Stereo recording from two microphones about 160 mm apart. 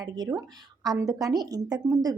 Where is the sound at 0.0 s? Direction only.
25° right (ahead or behind).